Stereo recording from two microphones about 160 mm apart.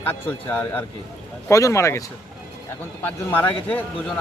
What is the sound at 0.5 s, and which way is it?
Speech, 10° left (ahead or behind).